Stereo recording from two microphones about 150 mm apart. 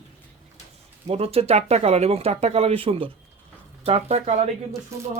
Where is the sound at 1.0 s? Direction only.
40° right (ahead or behind).